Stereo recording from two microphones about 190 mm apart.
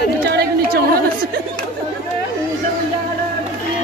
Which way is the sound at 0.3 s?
55° right (ahead or behind).